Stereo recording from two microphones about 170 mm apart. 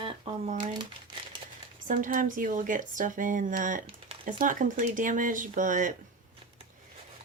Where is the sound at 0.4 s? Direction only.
45° right (ahead or behind).